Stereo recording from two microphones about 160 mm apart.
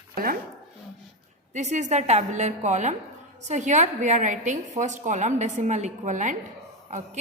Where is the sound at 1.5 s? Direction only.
45° right (ahead or behind).